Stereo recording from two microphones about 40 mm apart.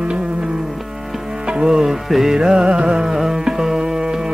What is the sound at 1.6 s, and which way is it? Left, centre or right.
Music, centre.